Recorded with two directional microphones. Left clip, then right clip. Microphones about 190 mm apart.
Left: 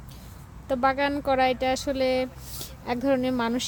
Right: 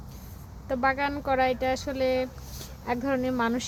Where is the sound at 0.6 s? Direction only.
15° left (ahead or behind).